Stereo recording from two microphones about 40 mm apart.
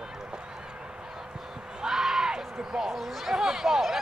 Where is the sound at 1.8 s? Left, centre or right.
Centre.